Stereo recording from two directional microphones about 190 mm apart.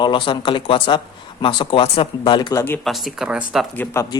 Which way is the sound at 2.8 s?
Centre (ahead or behind).